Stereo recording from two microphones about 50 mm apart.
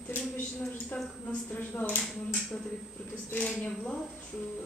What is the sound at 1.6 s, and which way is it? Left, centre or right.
Speech, left.